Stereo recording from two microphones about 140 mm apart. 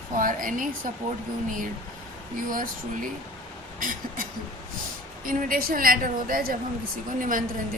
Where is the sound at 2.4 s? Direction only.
80° right.